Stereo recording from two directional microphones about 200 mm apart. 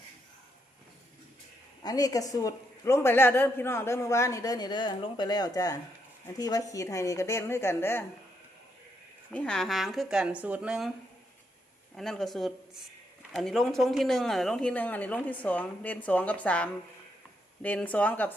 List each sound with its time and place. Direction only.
1.8 s a man's voice: 20° left (ahead or behind)
9.3 s speech: 5° left (ahead or behind)
11.9 s a man's voice: centre (ahead or behind)